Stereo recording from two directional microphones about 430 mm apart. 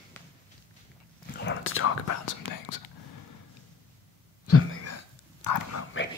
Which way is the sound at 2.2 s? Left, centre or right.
Left.